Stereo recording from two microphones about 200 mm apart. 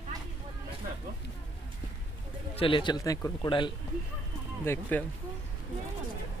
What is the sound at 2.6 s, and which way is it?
Speech, 25° left (ahead or behind).